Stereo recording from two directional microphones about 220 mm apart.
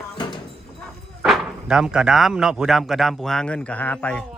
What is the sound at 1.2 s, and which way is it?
Speech, centre (ahead or behind).